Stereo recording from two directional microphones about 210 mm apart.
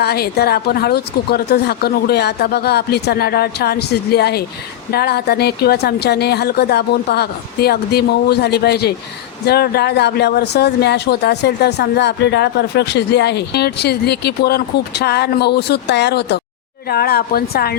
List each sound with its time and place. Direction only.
0.0 s speech: 50° left (ahead or behind)